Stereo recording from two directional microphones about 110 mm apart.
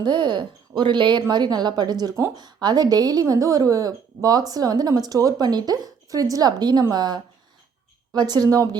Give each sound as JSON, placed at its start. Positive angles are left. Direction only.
{"t": 0.0, "sound": "speech", "side_deg": -45}